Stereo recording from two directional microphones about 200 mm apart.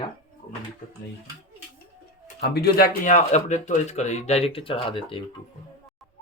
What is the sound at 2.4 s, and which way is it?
Speech, 55° left (ahead or behind).